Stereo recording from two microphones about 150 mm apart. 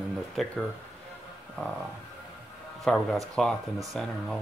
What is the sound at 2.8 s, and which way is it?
Speech, centre (ahead or behind).